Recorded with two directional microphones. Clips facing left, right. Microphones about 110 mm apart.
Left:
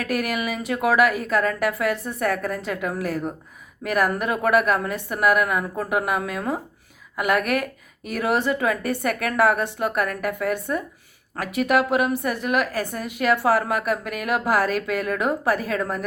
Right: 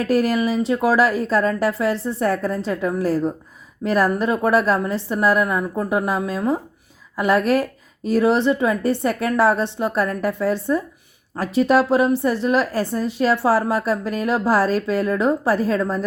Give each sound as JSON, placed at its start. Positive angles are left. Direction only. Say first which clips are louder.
{"t": 0.0, "sound": "speech", "louder": "right 7 dB", "side_deg": -30}